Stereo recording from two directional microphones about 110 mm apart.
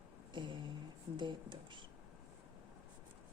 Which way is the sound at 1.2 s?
45° right (ahead or behind).